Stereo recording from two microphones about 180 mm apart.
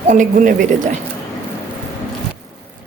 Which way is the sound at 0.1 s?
45° right (ahead or behind).